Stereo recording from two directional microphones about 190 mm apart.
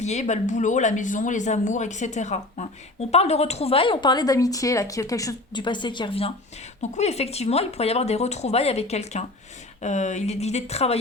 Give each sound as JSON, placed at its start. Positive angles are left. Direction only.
{"t": 0.0, "sound": "speech", "side_deg": 35}